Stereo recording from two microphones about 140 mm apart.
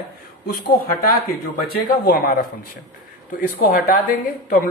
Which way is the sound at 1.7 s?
90° left.